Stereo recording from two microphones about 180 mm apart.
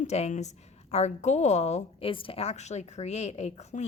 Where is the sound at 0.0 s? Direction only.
40° left (ahead or behind).